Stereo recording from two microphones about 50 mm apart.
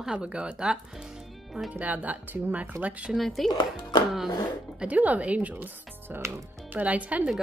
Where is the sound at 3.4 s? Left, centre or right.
Centre.